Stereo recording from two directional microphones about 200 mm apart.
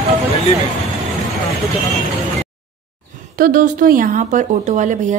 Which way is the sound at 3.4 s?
45° right (ahead or behind).